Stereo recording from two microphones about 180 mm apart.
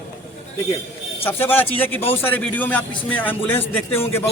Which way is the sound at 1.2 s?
10° left (ahead or behind).